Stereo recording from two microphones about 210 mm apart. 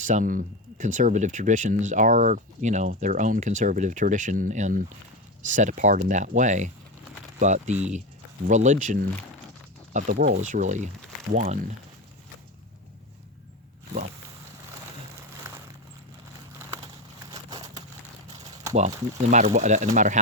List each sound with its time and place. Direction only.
0.0 s speech: 35° right (ahead or behind)
18.7 s speech: 30° right (ahead or behind)